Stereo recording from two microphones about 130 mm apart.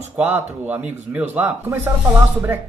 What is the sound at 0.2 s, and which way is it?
Speech, 15° right (ahead or behind).